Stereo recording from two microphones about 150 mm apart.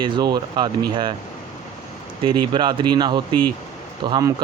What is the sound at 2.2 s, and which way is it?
Speech, 30° right (ahead or behind).